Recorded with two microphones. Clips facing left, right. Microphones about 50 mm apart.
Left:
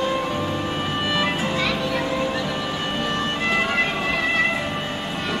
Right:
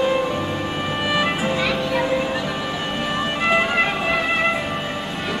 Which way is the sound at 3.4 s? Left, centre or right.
Centre.